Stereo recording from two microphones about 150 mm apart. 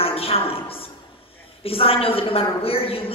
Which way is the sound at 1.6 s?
40° left (ahead or behind).